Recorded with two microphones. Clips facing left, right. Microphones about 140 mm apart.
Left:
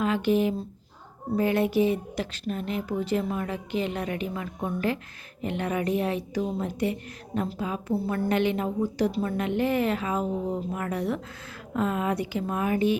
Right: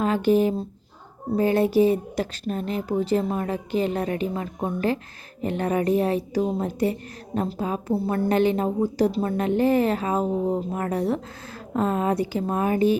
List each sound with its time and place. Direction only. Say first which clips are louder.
0.0 s speech: right 4 dB; 40° right (ahead or behind)
7.9 s speech: right 4 dB; 30° right (ahead or behind)